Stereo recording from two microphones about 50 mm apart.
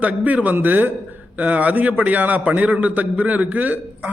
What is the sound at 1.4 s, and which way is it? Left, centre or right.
A man's voice, right.